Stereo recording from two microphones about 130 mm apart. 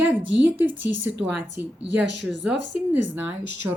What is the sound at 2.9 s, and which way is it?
Speech, 15° right (ahead or behind).